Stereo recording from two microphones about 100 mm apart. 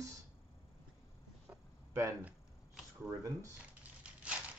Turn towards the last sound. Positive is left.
turn(degrees=-15)  # may be behind; listen again after turning